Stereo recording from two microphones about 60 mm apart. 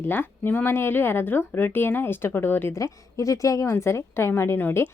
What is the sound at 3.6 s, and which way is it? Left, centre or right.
A woman's voice, left.